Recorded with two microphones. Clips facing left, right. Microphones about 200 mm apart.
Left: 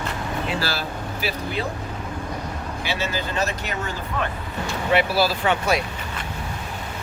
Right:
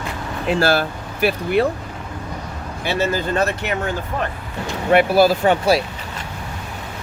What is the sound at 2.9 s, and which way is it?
Speech, 55° right (ahead or behind).